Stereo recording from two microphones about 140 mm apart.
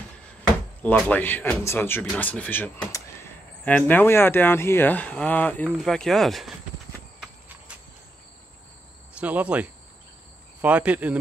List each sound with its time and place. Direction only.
0.8 s speech: 10° left (ahead or behind)
9.2 s speech: 10° right (ahead or behind)